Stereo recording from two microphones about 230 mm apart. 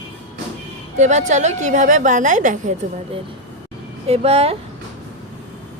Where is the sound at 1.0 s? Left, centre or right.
Right.